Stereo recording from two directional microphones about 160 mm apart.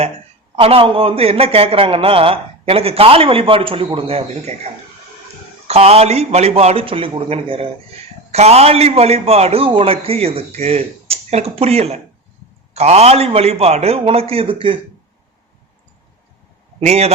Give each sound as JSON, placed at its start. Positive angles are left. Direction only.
{"t": 0.5, "sound": "a man's voice", "side_deg": -35}
{"t": 5.6, "sound": "a man's voice", "side_deg": -40}
{"t": 16.8, "sound": "a man's voice", "side_deg": -40}